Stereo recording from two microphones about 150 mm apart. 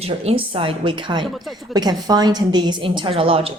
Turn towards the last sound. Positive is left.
turn(degrees=-40)  # may be behind; listen again after turning